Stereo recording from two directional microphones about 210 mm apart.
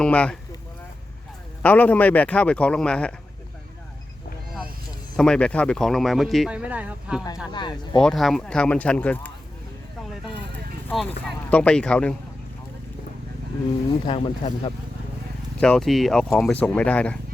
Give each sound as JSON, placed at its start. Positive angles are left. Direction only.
{"t": 0.0, "sound": "speech", "side_deg": 5}
{"t": 1.6, "sound": "speech", "side_deg": 5}
{"t": 5.1, "sound": "speech", "side_deg": 5}
{"t": 7.5, "sound": "speech", "side_deg": 20}
{"t": 8.0, "sound": "speech", "side_deg": 0}
{"t": 10.8, "sound": "speech", "side_deg": 5}
{"t": 14.1, "sound": "speech", "side_deg": 25}
{"t": 15.6, "sound": "speech", "side_deg": 0}